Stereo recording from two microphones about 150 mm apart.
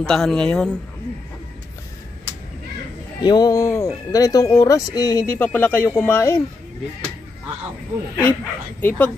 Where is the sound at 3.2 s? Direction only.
25° left (ahead or behind).